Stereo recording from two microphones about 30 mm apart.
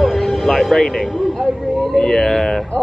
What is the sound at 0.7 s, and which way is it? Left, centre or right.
Speech, centre.